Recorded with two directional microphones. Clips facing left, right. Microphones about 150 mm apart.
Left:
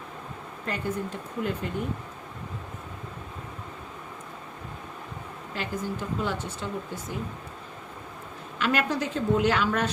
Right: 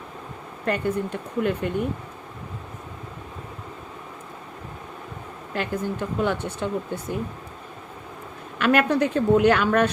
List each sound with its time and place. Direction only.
0.6 s speech: 65° right (ahead or behind)
5.5 s speech: 60° right (ahead or behind)
8.5 s speech: 60° right (ahead or behind)